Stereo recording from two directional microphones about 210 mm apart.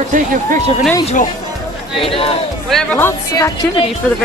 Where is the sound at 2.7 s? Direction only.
5° left (ahead or behind).